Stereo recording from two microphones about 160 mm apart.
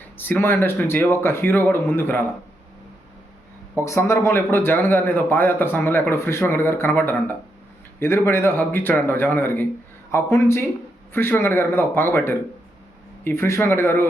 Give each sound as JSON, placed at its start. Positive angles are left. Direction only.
{"t": 0.2, "sound": "a man's voice", "side_deg": 10}
{"t": 3.8, "sound": "a man's voice", "side_deg": 15}